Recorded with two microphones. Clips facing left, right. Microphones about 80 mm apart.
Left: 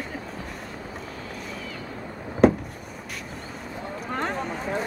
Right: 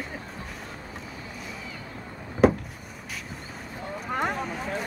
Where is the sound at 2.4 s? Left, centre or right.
Centre.